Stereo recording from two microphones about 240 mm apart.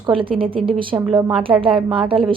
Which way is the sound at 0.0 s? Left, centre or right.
Right.